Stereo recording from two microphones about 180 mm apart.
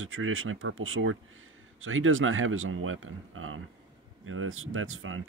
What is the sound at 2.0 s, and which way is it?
Speech, 90° right.